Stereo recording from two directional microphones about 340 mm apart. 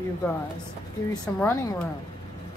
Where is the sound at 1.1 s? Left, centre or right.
Centre.